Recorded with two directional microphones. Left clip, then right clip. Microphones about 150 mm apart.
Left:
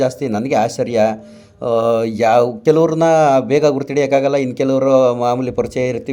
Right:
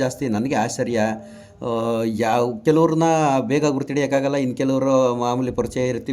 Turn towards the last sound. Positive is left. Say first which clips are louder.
# left 4 dB
turn(degrees=5)  # may be behind; listen again after turning